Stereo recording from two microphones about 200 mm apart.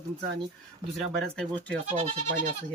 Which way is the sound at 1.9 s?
30° right (ahead or behind).